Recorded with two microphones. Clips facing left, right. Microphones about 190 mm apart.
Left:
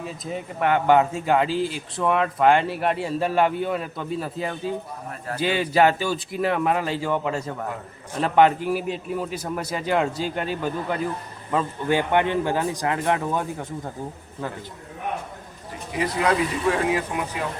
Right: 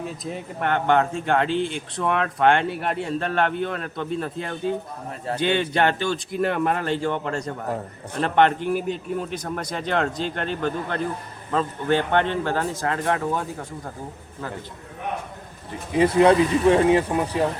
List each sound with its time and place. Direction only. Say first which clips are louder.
0.0 s a man's voice: even; centre (ahead or behind); by 13.2 s 15° left (ahead or behind)
16.0 s speech: right 7 dB; 25° right (ahead or behind)